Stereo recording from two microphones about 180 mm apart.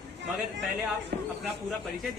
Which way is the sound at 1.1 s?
60° right (ahead or behind).